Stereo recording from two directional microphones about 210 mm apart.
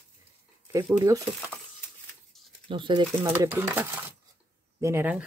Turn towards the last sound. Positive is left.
turn(degrees=-10)  # may be behind; listen again after turning